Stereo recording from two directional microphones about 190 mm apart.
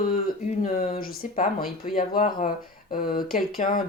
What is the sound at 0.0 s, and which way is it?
Speech, 45° left (ahead or behind).